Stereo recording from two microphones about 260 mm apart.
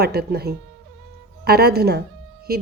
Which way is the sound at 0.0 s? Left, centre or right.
Right.